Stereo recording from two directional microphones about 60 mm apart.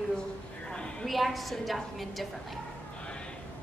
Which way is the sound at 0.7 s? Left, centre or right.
Centre.